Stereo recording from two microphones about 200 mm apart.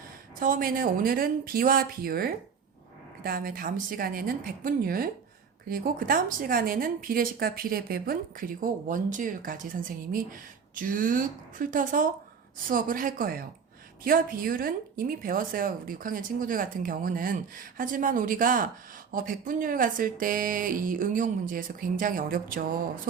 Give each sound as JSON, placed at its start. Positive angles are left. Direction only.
{"t": 0.3, "sound": "a woman's voice", "side_deg": -45}